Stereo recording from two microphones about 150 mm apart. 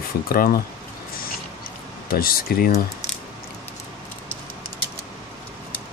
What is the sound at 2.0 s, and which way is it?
Speech, 80° left.